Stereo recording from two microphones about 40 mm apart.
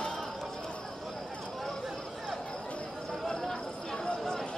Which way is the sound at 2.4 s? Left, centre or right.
Centre.